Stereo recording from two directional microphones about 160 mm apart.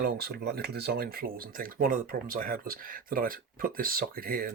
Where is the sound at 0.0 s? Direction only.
75° right (ahead or behind).